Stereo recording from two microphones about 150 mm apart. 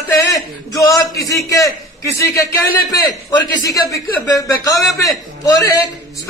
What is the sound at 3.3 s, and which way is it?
A man's voice, 20° left (ahead or behind).